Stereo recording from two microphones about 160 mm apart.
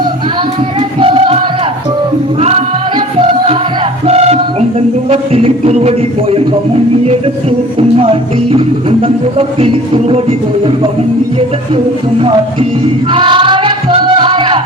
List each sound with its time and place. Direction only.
0.8 s music: 35° right (ahead or behind)
2.4 s music: 40° right (ahead or behind)
4.0 s music: 40° right (ahead or behind)
7.8 s music: 35° right (ahead or behind)
13.1 s music: 30° right (ahead or behind)